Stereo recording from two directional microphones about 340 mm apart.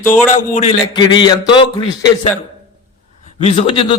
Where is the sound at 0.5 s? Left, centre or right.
Centre.